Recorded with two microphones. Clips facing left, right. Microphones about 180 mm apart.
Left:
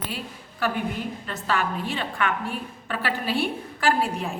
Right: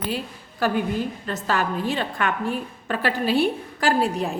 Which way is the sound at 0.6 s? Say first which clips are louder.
Right 4 dB; 40° right (ahead or behind).